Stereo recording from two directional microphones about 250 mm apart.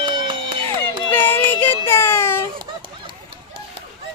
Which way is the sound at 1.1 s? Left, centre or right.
Centre.